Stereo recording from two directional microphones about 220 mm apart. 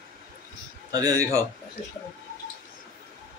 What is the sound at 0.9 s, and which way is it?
Speech, 15° right (ahead or behind).